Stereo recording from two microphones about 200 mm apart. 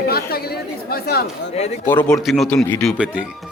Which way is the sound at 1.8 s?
5° left (ahead or behind).